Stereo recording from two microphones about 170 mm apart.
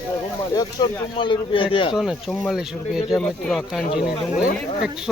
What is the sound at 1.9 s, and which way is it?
Speech, centre (ahead or behind).